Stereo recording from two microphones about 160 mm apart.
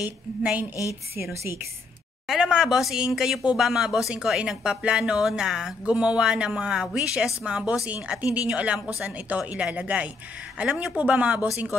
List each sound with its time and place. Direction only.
0.0 s speech: 10° right (ahead or behind)
2.2 s speech: 5° right (ahead or behind)